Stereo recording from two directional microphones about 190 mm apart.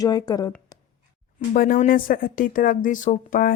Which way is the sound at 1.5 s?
45° left (ahead or behind).